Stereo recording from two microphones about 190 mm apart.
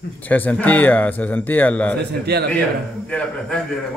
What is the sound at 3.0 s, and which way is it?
Speech, 5° left (ahead or behind).